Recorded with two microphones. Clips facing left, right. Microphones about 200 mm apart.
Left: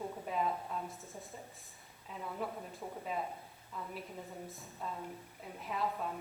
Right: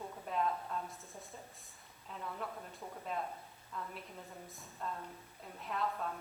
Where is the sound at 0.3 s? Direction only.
5° left (ahead or behind).